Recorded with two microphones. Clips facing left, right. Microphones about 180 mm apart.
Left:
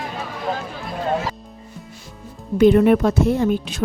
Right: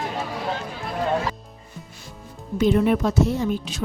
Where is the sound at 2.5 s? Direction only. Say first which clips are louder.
Left 6 dB; 60° left (ahead or behind).